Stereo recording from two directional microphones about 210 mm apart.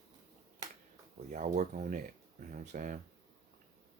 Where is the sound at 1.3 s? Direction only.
35° right (ahead or behind).